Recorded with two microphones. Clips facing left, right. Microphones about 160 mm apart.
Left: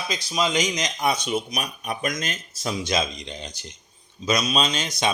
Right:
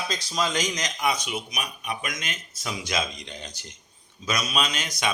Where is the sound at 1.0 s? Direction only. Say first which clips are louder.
Left 3 dB; 30° left (ahead or behind).